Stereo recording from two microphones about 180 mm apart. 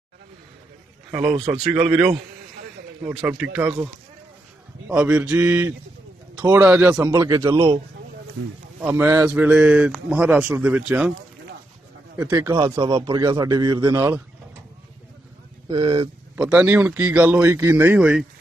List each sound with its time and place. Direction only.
1.3 s a man's voice: 30° right (ahead or behind)
1.6 s a man's voice: 5° right (ahead or behind)
4.8 s a man's voice: 10° right (ahead or behind)
7.5 s speech: 35° right (ahead or behind)
8.8 s a man's voice: 10° right (ahead or behind)
12.2 s a man's voice: 20° right (ahead or behind)
15.7 s a man's voice: 25° right (ahead or behind)
16.3 s a man's voice: 5° right (ahead or behind)